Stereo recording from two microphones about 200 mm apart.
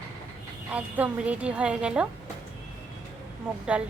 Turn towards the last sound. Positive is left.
turn(degrees=-5)  # may be behind; listen again after turning